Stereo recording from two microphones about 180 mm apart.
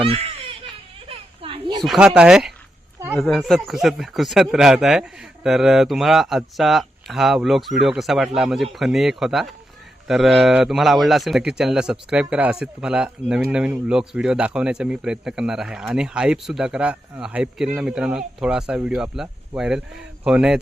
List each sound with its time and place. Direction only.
0.0 s baby cry: 30° right (ahead or behind)
1.0 s a sound: 30° right (ahead or behind)
1.8 s a man's voice: centre (ahead or behind)